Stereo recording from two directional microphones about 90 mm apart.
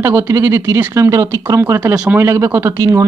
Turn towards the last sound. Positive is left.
turn(degrees=-30)  # may be behind; listen again after turning